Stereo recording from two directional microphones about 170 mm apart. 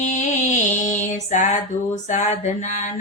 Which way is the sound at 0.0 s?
45° left (ahead or behind).